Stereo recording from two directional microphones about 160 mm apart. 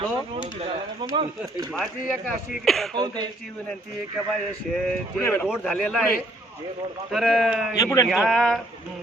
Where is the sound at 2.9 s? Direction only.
25° right (ahead or behind).